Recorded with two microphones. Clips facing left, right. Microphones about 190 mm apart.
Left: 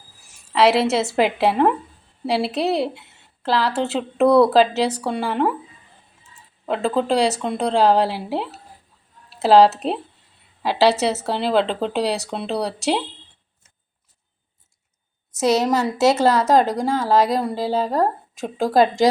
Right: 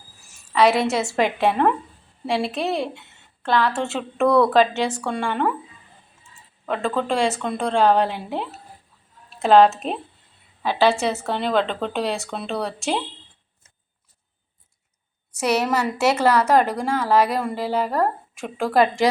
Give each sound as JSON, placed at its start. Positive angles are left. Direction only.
{"t": 0.5, "sound": "a woman's voice", "side_deg": 30}
{"t": 6.7, "sound": "a woman's voice", "side_deg": 30}
{"t": 15.3, "sound": "a woman's voice", "side_deg": 20}
{"t": 18.3, "sound": "a woman's voice", "side_deg": 35}